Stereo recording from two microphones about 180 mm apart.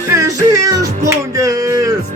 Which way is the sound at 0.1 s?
20° right (ahead or behind).